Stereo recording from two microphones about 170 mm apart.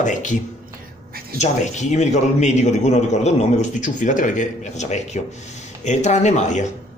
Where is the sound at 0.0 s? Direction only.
45° left (ahead or behind).